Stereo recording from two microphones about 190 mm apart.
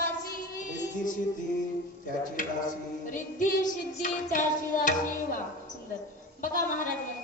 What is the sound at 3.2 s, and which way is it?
Child singing, 45° left (ahead or behind).